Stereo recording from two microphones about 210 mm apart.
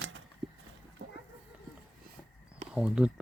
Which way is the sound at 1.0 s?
55° right (ahead or behind).